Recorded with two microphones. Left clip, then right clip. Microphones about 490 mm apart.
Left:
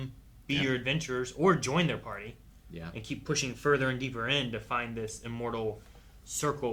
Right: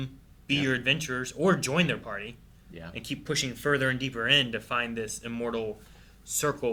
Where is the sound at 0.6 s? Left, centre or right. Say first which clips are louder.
Right 4 dB; left.